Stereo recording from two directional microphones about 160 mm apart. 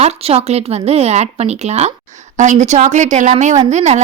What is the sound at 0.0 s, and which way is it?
Speech, 40° right (ahead or behind).